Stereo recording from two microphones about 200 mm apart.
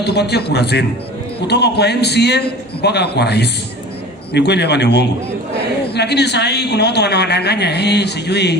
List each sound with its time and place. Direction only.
0.0 s a woman's voice: 55° left (ahead or behind)